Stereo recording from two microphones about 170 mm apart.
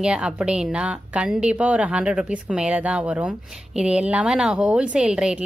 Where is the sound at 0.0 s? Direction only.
5° right (ahead or behind).